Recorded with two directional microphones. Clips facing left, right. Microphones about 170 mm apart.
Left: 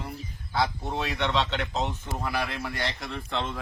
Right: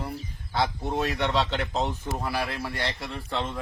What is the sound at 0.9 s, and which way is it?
Speech, 40° right (ahead or behind).